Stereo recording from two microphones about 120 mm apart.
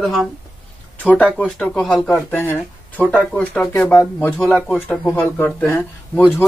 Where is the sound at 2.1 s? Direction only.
15° left (ahead or behind).